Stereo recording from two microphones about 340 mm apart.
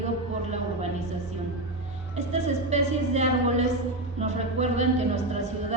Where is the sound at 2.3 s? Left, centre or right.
Centre.